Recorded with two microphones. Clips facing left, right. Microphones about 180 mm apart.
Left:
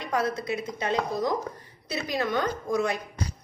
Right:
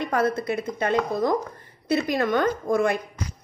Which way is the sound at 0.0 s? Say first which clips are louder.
Right 4 dB; 55° right (ahead or behind).